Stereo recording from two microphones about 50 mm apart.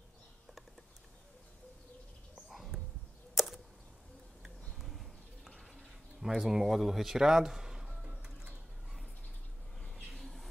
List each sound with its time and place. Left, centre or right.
2.7 s arrow: centre
3.3 s arrow: centre
4.4 s a sound: centre
6.2 s speech: centre
9.8 s a sound: centre
10.1 s squawk: centre